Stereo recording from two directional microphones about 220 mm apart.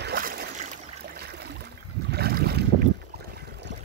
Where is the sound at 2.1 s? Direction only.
45° right (ahead or behind).